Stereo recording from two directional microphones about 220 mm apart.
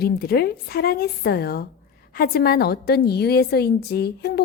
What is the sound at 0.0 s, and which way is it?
A woman's voice, 45° left (ahead or behind).